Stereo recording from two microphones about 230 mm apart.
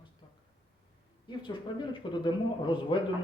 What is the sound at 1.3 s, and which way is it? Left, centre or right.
A woman's voice, left.